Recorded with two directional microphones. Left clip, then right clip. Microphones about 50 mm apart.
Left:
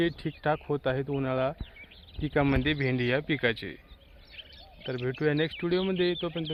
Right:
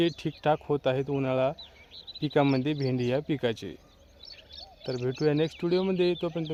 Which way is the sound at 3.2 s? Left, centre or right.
Right.